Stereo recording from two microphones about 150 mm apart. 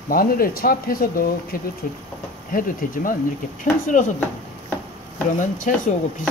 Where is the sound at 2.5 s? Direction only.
65° left (ahead or behind).